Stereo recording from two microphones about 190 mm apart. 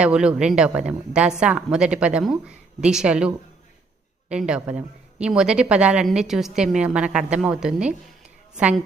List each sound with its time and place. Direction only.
0.0 s a woman's voice: 5° right (ahead or behind)